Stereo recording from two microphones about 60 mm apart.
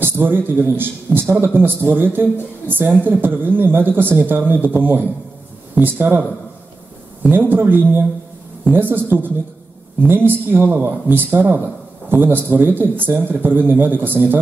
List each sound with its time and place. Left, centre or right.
0.0 s a man's voice: right
7.2 s a man's voice: right